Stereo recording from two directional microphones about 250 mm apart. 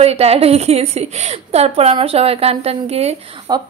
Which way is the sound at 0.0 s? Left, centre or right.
Right.